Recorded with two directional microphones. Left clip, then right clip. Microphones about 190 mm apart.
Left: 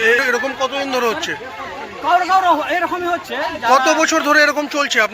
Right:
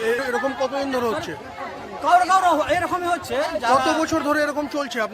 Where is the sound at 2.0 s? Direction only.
30° right (ahead or behind).